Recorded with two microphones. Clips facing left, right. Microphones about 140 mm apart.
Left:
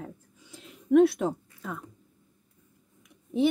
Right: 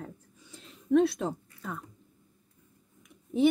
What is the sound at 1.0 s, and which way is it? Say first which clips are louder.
Speech: left 5 dB; 20° left (ahead or behind).